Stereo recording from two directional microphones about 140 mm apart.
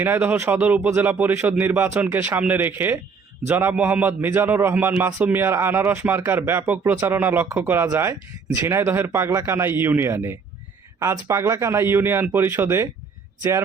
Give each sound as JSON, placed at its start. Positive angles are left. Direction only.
{"t": 0.0, "sound": "a man's voice", "side_deg": -15}